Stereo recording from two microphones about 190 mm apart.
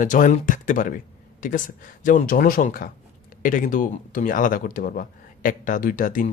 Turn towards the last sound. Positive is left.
turn(degrees=45)  # may be behind; listen again after turning